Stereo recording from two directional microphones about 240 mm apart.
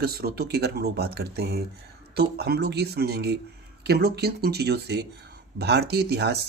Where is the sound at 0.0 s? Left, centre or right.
Right.